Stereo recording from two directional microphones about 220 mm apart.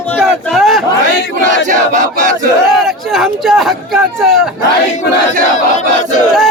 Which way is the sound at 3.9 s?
Centre (ahead or behind).